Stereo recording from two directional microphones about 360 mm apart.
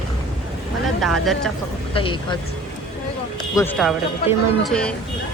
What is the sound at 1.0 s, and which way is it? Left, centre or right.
Speech, centre.